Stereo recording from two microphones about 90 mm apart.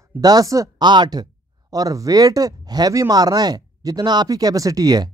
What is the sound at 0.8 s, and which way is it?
Speech, 55° right (ahead or behind).